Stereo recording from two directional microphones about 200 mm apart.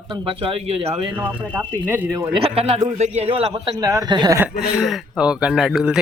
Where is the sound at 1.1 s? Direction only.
10° right (ahead or behind).